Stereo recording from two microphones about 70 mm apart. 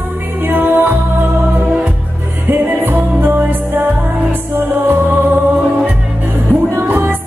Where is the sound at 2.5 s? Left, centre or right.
Right.